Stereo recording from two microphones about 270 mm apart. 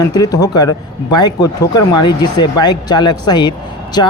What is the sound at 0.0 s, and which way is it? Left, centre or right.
A man's voice, centre.